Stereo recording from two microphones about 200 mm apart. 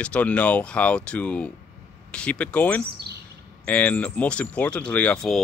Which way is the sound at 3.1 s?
55° right (ahead or behind).